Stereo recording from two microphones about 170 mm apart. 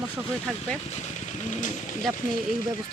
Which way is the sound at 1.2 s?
45° left (ahead or behind).